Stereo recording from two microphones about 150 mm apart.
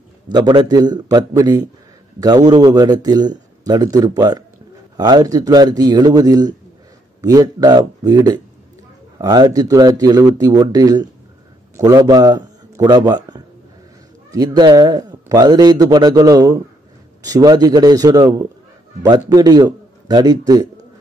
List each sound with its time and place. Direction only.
0.3 s a man's voice: 30° right (ahead or behind)